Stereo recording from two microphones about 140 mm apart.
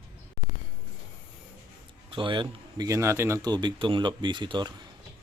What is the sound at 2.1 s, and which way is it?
Speech, 35° right (ahead or behind).